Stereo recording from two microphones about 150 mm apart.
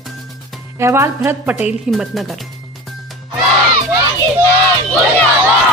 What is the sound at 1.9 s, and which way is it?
Speech, centre (ahead or behind).